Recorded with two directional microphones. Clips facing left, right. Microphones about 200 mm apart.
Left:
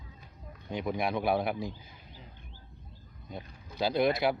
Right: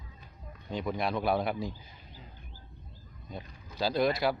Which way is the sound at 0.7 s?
15° left (ahead or behind).